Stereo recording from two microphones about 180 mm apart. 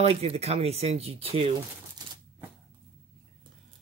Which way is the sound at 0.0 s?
35° right (ahead or behind).